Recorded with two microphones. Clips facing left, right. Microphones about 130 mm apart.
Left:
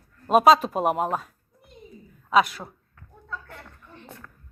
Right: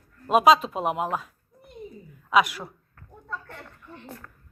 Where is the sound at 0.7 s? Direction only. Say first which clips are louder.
Left 3 dB; 40° left (ahead or behind).